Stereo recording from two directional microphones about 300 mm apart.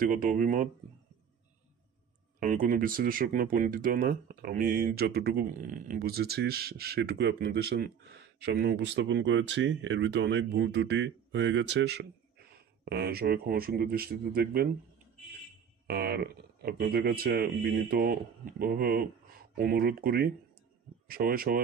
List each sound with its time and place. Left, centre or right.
0.0 s speech: right
2.4 s speech: right
15.9 s speech: right